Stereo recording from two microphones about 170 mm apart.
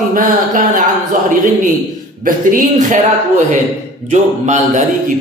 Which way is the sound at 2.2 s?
50° right (ahead or behind).